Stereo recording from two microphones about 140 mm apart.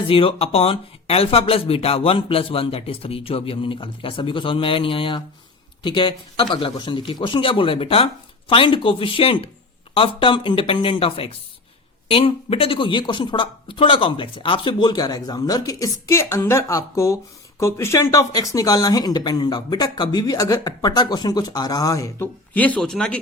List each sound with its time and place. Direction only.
0.1 s speech: 40° left (ahead or behind); by 22.3 s 20° left (ahead or behind)
22.5 s speech: 10° left (ahead or behind)